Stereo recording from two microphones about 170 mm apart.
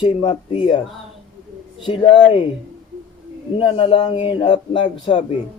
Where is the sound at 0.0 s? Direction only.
25° left (ahead or behind).